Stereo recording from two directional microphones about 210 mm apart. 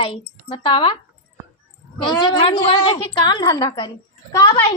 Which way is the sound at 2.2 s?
25° left (ahead or behind).